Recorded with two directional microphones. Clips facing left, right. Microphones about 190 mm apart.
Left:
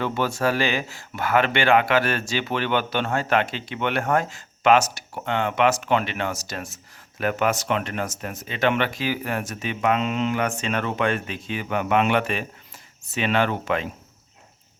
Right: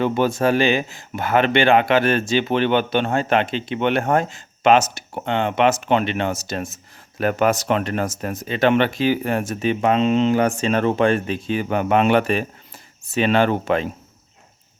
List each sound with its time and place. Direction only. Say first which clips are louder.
0.0 s speech: right 5 dB; 20° right (ahead or behind)
7.2 s speech: right 4 dB; 40° right (ahead or behind)